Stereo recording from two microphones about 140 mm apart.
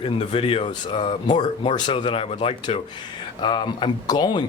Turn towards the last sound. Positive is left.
turn(degrees=30)  # may be behind; listen again after turning